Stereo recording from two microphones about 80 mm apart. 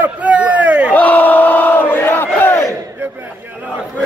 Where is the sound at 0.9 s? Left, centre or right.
Centre.